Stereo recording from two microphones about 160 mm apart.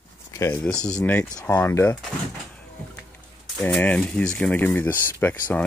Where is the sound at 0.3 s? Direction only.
15° left (ahead or behind).